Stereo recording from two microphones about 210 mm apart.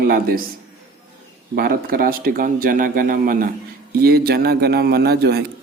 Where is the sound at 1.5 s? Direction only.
45° right (ahead or behind).